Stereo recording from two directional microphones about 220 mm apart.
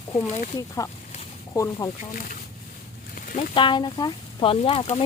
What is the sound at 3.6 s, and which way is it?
Speech, 20° left (ahead or behind).